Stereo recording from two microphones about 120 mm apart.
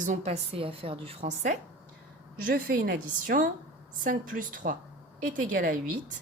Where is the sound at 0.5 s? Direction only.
50° right (ahead or behind).